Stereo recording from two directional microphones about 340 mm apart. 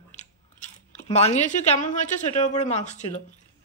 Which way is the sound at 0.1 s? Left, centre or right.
Centre.